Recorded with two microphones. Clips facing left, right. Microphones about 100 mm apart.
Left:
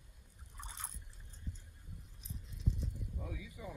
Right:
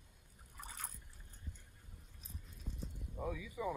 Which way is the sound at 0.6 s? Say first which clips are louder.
Even; 20° left (ahead or behind).